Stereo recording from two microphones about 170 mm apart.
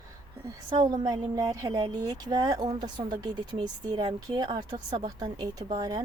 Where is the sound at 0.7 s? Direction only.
25° right (ahead or behind).